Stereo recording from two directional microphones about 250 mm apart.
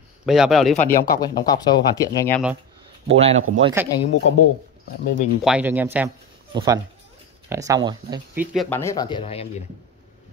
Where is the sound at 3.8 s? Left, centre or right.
Centre.